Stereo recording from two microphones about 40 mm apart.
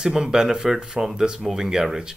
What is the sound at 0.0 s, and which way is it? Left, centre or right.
Speech, centre.